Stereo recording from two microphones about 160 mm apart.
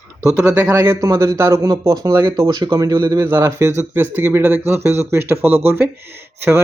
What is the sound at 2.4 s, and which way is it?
Speech, 30° right (ahead or behind).